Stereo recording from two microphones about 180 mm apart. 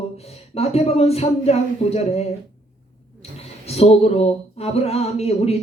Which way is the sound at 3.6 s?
35° left (ahead or behind).